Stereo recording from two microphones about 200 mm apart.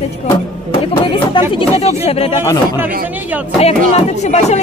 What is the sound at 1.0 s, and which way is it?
Speech, 25° left (ahead or behind).